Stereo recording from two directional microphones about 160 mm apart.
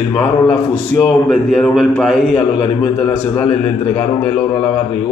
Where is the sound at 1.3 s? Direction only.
Centre (ahead or behind).